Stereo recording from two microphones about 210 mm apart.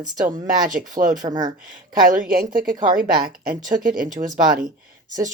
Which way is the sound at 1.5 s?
40° right (ahead or behind).